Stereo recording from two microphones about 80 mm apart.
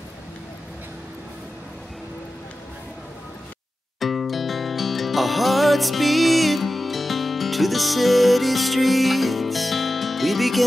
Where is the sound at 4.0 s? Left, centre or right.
Centre.